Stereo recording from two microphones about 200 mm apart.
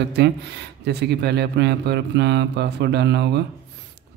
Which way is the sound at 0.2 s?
55° right (ahead or behind).